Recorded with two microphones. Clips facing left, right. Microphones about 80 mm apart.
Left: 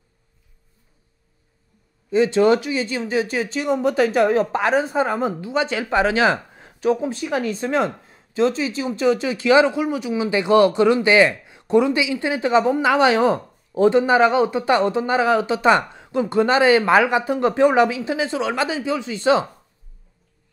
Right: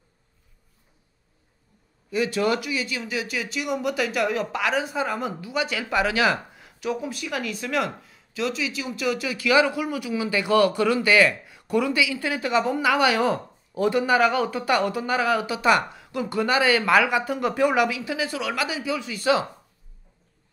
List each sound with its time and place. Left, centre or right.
2.0 s speech: left